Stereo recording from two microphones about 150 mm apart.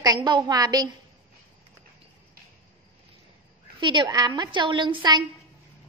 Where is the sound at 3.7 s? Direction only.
30° right (ahead or behind).